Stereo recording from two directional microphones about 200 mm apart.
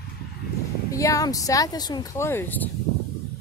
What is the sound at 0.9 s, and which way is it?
Speech, 15° left (ahead or behind).